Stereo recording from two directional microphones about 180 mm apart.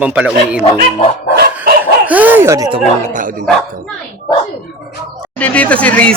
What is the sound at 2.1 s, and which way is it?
Speech, 10° right (ahead or behind).